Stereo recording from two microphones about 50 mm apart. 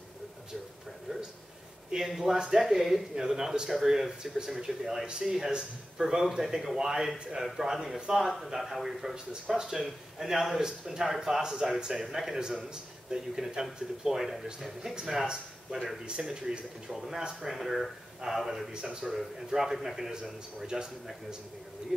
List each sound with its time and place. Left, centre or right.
1.9 s a man's voice: centre
5.5 s a man's voice: centre
16.1 s a man's voice: centre
16.9 s a man's voice: centre